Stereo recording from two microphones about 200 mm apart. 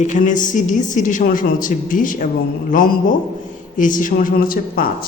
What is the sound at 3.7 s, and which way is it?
Speech, 40° left (ahead or behind).